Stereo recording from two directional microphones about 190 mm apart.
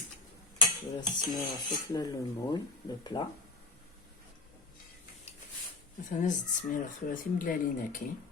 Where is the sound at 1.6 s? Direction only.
20° left (ahead or behind).